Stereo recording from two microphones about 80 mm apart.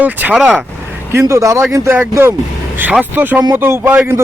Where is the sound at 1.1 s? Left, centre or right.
Right.